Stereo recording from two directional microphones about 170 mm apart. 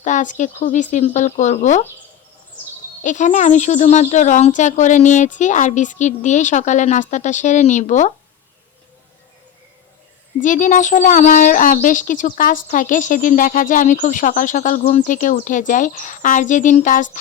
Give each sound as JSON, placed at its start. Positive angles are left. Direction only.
{"t": 0.0, "sound": "speech", "side_deg": 45}
{"t": 3.0, "sound": "speech", "side_deg": 45}
{"t": 10.4, "sound": "speech", "side_deg": 50}